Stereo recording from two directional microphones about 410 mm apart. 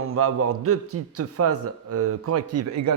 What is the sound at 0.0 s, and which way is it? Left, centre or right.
A man's voice, right.